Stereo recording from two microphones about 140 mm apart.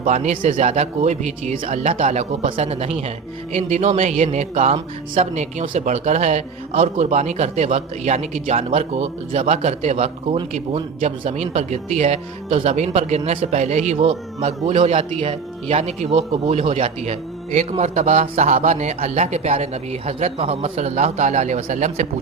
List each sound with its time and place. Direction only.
0.0 s a man's voice: 60° right (ahead or behind)